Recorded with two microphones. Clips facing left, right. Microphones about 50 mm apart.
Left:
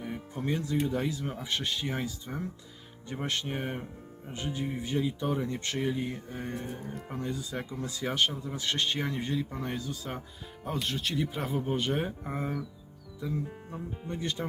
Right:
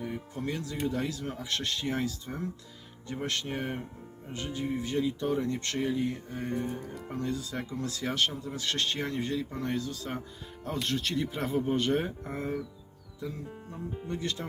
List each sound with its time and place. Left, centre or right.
0.0 s music: centre
0.4 s speech: left
3.2 s speech: centre
7.0 s speech: centre